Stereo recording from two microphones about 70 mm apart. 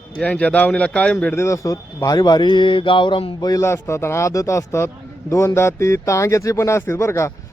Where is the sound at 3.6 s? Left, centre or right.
Left.